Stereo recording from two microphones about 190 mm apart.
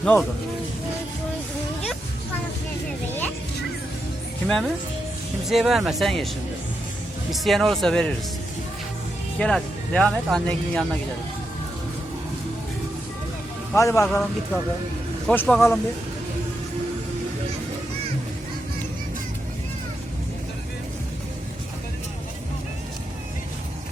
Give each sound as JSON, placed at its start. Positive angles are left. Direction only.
{"t": 0.0, "sound": "speech", "side_deg": 5}
{"t": 4.4, "sound": "speech", "side_deg": 0}
{"t": 7.4, "sound": "speech", "side_deg": 0}
{"t": 9.4, "sound": "speech", "side_deg": 5}
{"t": 13.7, "sound": "speech", "side_deg": 15}
{"t": 15.3, "sound": "speech", "side_deg": 5}